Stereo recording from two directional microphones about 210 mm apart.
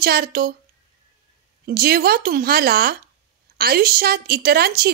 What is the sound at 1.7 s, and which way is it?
Speech, 45° right (ahead or behind).